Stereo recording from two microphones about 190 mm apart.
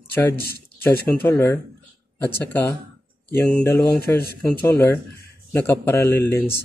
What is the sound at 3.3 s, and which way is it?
A man's voice, 10° left (ahead or behind).